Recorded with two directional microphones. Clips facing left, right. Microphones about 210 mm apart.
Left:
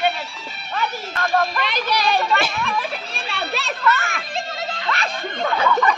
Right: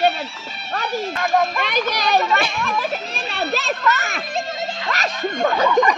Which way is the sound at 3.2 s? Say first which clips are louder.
Right 4 dB; 40° right (ahead or behind).